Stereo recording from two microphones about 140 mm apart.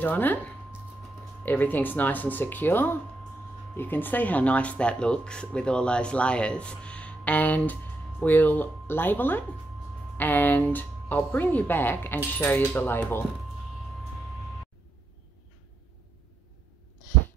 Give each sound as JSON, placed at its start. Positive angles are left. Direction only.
{"t": 0.0, "sound": "speech", "side_deg": 10}
{"t": 1.4, "sound": "speech", "side_deg": 15}